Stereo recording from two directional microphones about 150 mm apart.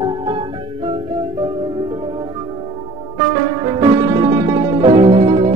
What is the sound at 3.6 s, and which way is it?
Music, 30° right (ahead or behind).